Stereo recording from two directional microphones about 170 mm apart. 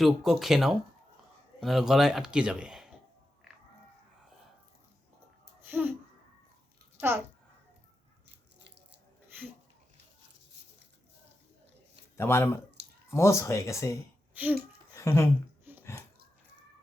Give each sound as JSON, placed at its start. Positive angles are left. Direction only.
{"t": 0.0, "sound": "a man's voice", "side_deg": 0}
{"t": 5.6, "sound": "a child's voice", "side_deg": -10}
{"t": 12.1, "sound": "speech", "side_deg": 15}
{"t": 14.3, "sound": "a child's voice", "side_deg": -10}
{"t": 14.9, "sound": "a sound", "side_deg": 15}
{"t": 15.7, "sound": "a sound", "side_deg": -10}